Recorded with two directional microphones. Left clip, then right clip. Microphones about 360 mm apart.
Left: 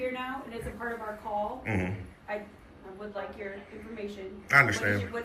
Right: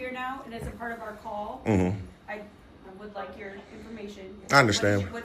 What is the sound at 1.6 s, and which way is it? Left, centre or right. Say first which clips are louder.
Speech: right 6 dB; centre.